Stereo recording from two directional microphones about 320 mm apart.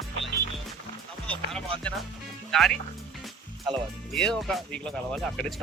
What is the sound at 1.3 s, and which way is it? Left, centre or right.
Music, centre.